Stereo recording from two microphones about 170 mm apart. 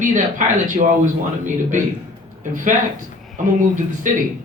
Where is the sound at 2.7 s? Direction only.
45° right (ahead or behind).